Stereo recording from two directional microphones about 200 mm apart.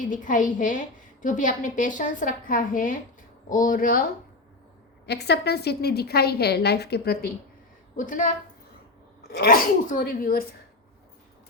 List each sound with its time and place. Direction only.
0.0 s a woman's voice: 40° left (ahead or behind)